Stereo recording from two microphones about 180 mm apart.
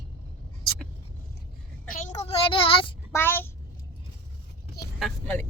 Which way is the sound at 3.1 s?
10° left (ahead or behind).